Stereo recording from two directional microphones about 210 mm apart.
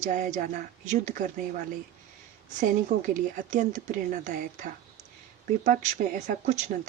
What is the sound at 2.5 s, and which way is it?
A woman's voice, 35° right (ahead or behind).